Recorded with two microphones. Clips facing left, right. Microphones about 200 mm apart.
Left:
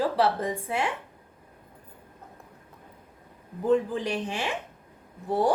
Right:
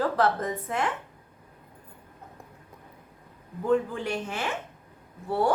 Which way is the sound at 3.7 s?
15° left (ahead or behind).